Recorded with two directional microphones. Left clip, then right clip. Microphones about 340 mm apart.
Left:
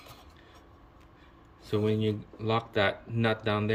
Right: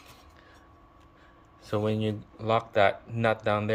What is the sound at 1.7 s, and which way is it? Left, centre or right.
Speech, centre.